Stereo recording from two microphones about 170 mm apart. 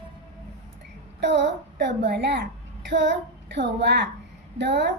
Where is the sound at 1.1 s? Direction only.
90° right.